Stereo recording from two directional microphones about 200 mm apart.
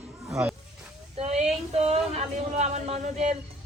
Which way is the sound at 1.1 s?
30° right (ahead or behind).